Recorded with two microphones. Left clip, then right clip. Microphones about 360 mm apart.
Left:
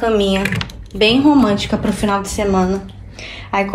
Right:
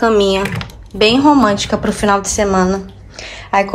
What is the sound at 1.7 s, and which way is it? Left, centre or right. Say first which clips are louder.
Speech: right 4 dB; right.